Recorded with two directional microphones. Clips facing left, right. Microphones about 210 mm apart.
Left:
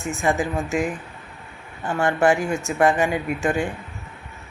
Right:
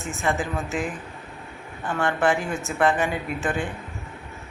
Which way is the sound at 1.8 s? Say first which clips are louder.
Left 3 dB; 15° left (ahead or behind).